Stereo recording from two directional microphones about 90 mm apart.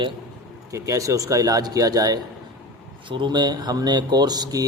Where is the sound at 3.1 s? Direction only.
60° right (ahead or behind).